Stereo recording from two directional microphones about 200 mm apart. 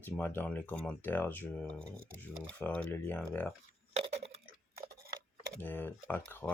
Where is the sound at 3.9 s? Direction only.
30° right (ahead or behind).